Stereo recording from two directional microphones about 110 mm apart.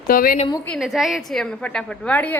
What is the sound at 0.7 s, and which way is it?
A child's voice, centre (ahead or behind).